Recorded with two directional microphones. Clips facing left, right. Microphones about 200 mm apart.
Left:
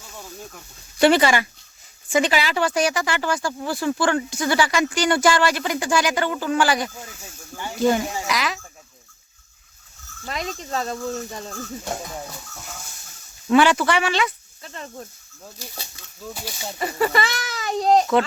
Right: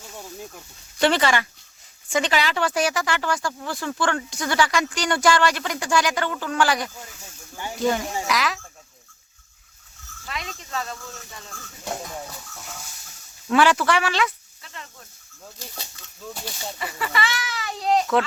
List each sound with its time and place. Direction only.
0.9 s speech: 10° left (ahead or behind)
8.3 s cricket: centre (ahead or behind)
10.2 s speech: 40° left (ahead or behind)
11.9 s speech: 5° left (ahead or behind)
13.5 s speech: centre (ahead or behind)
14.6 s speech: 40° left (ahead or behind)
15.5 s speech: 10° left (ahead or behind)
16.7 s speech: 40° left (ahead or behind)